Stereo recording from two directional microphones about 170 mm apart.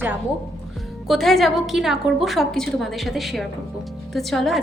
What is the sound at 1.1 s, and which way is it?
A woman's voice, centre (ahead or behind).